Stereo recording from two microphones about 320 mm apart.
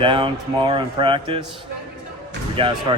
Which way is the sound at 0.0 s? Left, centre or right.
Centre.